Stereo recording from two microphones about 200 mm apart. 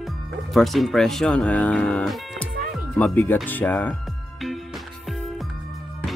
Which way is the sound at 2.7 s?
5° left (ahead or behind).